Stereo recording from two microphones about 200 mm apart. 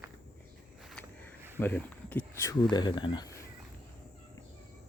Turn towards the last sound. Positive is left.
turn(degrees=20)  # may be behind; listen again after turning